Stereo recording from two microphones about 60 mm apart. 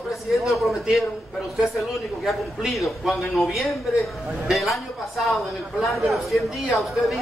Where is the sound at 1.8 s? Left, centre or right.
Centre.